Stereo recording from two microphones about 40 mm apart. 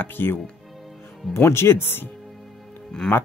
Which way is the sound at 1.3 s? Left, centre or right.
Left.